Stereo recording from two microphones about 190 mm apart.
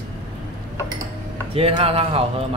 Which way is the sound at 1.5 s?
30° right (ahead or behind).